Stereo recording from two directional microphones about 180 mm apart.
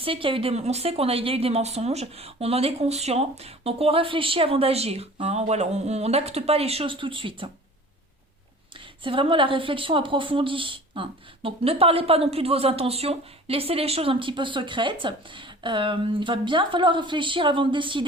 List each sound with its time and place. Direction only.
0.0 s a woman's voice: 30° right (ahead or behind)
8.8 s speech: 30° right (ahead or behind)